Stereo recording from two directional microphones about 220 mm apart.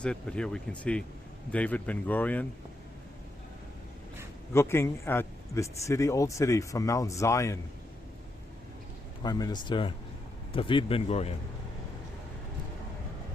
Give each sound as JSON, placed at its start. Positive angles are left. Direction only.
{"t": 0.0, "sound": "a man's voice", "side_deg": 5}
{"t": 4.5, "sound": "a man's voice", "side_deg": 10}
{"t": 9.2, "sound": "a man's voice", "side_deg": 15}